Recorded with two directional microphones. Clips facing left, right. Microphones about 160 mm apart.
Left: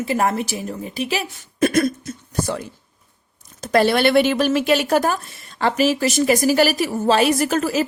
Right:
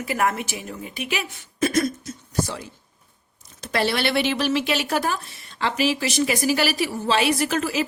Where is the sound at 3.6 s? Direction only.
45° left (ahead or behind).